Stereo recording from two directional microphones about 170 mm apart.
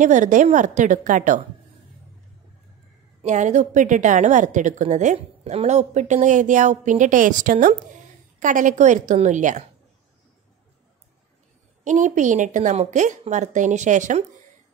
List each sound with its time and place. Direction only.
0.0 s a woman's voice: 45° right (ahead or behind)
3.2 s a woman's voice: 45° right (ahead or behind)
11.8 s a woman's voice: 45° right (ahead or behind)